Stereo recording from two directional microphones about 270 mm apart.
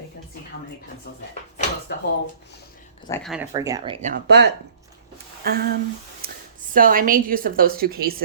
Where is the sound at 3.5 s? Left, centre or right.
Centre.